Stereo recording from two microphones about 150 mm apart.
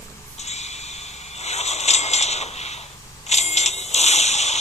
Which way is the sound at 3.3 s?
45° left (ahead or behind).